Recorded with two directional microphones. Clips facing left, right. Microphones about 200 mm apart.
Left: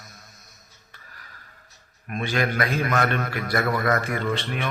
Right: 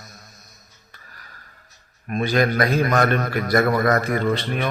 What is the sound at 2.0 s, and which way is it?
A man's voice, 40° right (ahead or behind).